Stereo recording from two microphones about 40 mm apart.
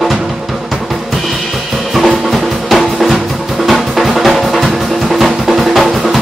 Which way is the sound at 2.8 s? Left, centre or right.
Centre.